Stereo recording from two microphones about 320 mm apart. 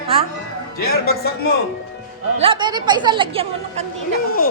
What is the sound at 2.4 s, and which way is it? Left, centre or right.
A woman's voice, centre.